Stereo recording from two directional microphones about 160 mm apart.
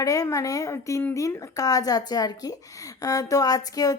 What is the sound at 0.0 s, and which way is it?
A woman's voice, 20° left (ahead or behind).